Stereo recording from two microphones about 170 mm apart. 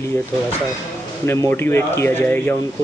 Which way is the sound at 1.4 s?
15° left (ahead or behind).